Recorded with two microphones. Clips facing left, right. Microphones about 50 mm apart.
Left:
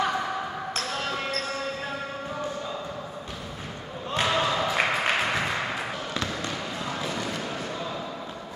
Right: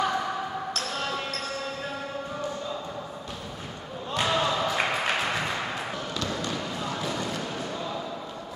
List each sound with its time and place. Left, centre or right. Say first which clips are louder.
0.0 s basketball bounce: even; centre
4.3 s a sound: even; centre
6.1 s basketball bounce: right 1 dB; left